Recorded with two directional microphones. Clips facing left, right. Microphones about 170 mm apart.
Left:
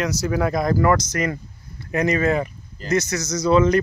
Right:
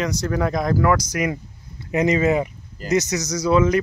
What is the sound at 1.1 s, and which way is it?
Speech, 10° right (ahead or behind).